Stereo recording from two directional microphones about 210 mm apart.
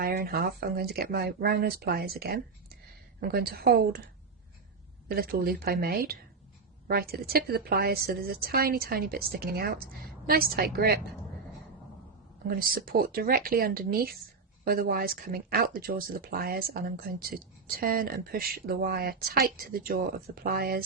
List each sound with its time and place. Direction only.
0.0 s speech: 50° right (ahead or behind)
5.0 s speech: 45° right (ahead or behind)
12.5 s speech: 45° right (ahead or behind)